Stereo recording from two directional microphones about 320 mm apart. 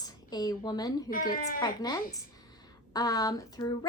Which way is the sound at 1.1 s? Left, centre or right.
Left.